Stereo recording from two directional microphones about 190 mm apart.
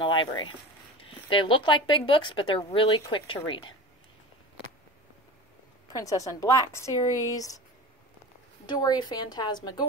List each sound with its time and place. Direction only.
0.0 s speech: 25° left (ahead or behind)
5.9 s speech: 15° left (ahead or behind)
8.6 s speech: 20° left (ahead or behind)